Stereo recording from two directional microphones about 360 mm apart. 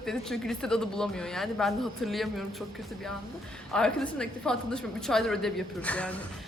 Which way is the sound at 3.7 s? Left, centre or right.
Centre.